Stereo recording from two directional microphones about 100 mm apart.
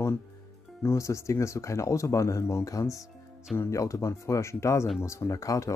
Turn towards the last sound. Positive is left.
turn(degrees=35)  # may be behind; listen again after turning